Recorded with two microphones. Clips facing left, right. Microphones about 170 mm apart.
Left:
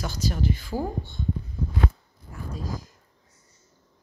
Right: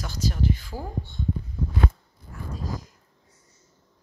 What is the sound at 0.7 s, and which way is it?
Speech, 50° left (ahead or behind).